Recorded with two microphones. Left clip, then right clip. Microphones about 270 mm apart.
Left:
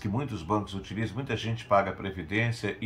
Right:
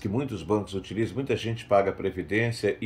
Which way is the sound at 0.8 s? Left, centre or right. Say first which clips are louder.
Right 6 dB; centre.